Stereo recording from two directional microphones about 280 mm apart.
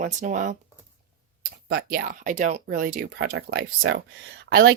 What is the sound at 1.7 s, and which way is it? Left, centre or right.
Speech, right.